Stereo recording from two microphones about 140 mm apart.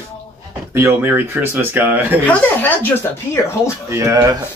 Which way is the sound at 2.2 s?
15° left (ahead or behind).